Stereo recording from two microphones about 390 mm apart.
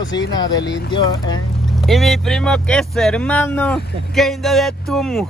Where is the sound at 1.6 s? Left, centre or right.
Centre.